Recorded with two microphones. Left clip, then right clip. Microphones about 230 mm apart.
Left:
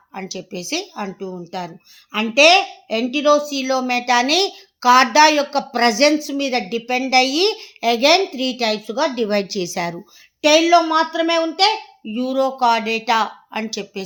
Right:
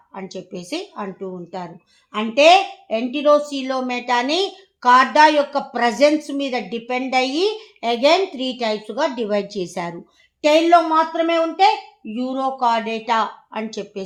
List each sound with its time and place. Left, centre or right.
0.1 s a woman's voice: left